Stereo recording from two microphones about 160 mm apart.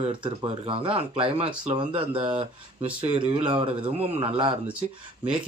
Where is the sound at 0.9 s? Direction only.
35° right (ahead or behind).